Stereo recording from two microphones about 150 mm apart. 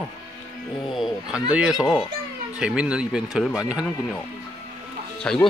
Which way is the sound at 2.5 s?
10° right (ahead or behind).